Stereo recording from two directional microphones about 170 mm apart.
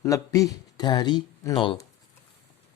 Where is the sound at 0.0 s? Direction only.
20° left (ahead or behind).